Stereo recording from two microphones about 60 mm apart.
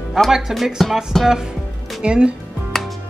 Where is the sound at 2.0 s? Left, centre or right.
Centre.